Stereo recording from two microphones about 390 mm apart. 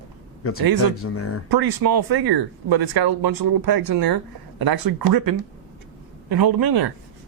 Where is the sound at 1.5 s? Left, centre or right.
Right.